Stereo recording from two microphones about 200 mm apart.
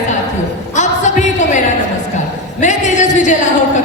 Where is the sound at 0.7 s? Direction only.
35° left (ahead or behind).